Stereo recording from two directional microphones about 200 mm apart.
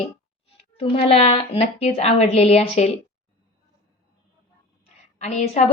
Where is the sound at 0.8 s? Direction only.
30° left (ahead or behind).